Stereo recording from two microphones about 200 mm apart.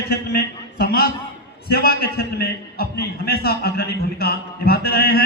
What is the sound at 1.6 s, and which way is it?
A man's voice, 50° left (ahead or behind).